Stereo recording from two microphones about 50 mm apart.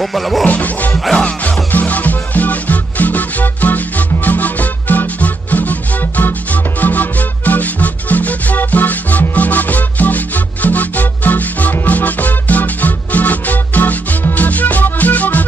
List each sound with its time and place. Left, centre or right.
0.0 s music: centre
0.5 s music: left
1.1 s music: left